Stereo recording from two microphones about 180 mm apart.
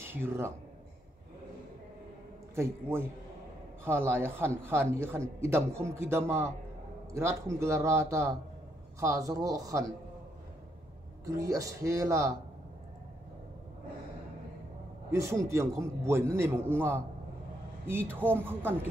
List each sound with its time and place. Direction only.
0.0 s speech: 15° right (ahead or behind)
2.5 s a man's voice: 15° right (ahead or behind)
11.2 s a man's voice: 20° right (ahead or behind)
15.0 s a man's voice: 15° right (ahead or behind)